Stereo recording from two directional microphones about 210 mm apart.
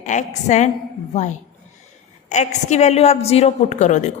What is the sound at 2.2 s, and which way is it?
A woman's voice, 35° left (ahead or behind).